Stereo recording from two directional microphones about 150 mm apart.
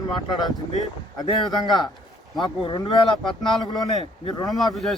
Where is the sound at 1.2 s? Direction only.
25° left (ahead or behind).